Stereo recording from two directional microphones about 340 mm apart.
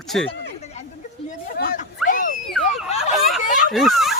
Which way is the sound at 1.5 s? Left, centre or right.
Left.